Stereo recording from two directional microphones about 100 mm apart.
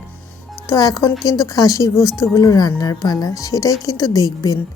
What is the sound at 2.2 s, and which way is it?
Speech, 35° left (ahead or behind).